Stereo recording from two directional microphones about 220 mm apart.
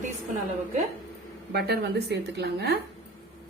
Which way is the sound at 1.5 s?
45° right (ahead or behind).